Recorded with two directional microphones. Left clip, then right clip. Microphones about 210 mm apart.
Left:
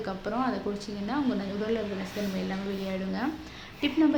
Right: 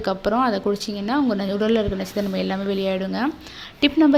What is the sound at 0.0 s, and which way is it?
Speech, 40° right (ahead or behind).